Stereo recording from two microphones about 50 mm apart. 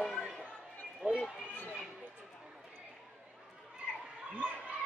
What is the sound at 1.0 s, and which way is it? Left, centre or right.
Speech, centre.